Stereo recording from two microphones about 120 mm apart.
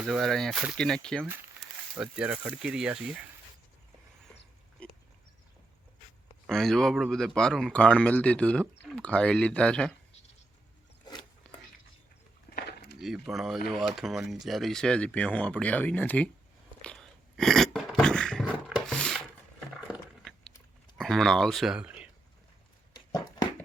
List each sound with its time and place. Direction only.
0.0 s speech: centre (ahead or behind)
2.0 s speech: 10° right (ahead or behind)
4.8 s pig: 10° left (ahead or behind)
6.5 s speech: 5° left (ahead or behind)
11.4 s a sound: 5° left (ahead or behind)
13.0 s speech: centre (ahead or behind)
16.8 s a sound: 5° left (ahead or behind)
18.9 s wood: 5° left (ahead or behind)
21.0 s speech: 5° left (ahead or behind)
22.9 s a sound: 35° left (ahead or behind)